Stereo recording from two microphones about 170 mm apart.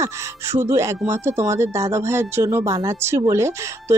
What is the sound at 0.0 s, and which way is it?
Speech, 15° right (ahead or behind).